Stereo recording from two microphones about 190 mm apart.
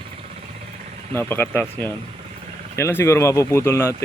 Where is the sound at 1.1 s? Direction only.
10° left (ahead or behind).